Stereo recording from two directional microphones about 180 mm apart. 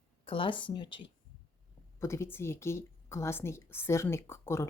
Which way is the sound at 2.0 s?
15° left (ahead or behind).